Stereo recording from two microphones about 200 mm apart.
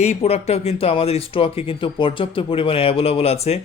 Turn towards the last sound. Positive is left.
turn(degrees=30)  # may be behind; listen again after turning